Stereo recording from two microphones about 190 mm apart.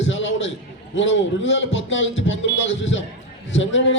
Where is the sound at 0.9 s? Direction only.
80° left.